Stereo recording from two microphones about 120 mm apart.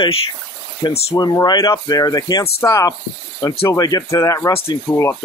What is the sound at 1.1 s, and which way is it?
Speech, 35° left (ahead or behind).